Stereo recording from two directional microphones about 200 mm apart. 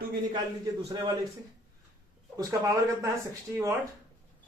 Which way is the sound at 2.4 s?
15° right (ahead or behind).